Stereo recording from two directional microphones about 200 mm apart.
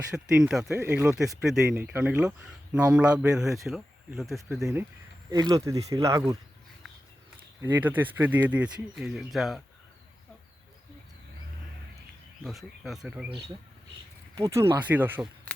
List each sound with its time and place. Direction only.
0.3 s speech: 5° right (ahead or behind)
4.6 s speech: 10° right (ahead or behind)
7.6 s speech: 10° right (ahead or behind)
12.4 s speech: centre (ahead or behind)
14.3 s speech: 15° right (ahead or behind)